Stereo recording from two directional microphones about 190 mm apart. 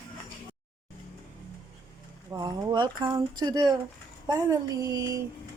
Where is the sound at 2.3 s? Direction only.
20° right (ahead or behind).